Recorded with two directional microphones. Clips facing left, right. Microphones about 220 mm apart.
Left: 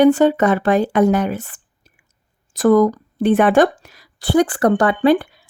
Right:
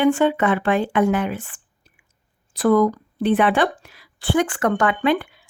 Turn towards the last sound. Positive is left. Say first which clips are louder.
# left 6 dB
turn(degrees=35)  # may be behind; listen again after turning